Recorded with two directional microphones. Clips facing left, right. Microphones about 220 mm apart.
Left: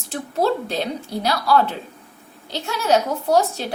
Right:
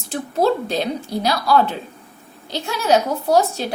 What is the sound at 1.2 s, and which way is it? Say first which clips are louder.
A woman's voice: right 1 dB; 15° right (ahead or behind).